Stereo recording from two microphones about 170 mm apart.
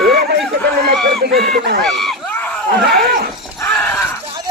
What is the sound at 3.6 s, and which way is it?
Shatter, 10° left (ahead or behind).